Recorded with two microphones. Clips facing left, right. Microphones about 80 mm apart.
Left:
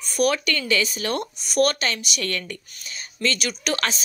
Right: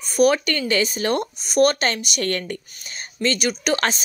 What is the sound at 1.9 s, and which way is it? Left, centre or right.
Speech, right.